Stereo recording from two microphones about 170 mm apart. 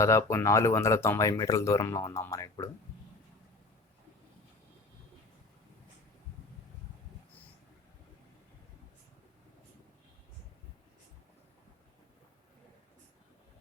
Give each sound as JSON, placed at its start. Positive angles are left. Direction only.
{"t": 0.0, "sound": "speech", "side_deg": 15}